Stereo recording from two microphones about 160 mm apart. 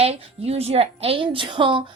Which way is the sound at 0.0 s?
40° right (ahead or behind).